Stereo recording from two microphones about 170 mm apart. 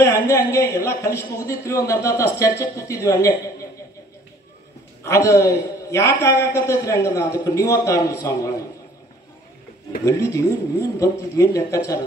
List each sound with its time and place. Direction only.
0.0 s a man's voice: 20° left (ahead or behind)
5.0 s a man's voice: 20° left (ahead or behind)
10.0 s speech: 20° left (ahead or behind)